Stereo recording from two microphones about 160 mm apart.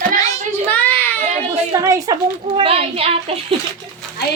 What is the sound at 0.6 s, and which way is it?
Speech, 10° left (ahead or behind).